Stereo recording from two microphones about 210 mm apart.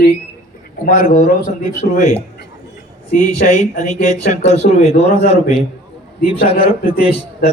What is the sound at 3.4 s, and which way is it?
A man's voice, 40° left (ahead or behind).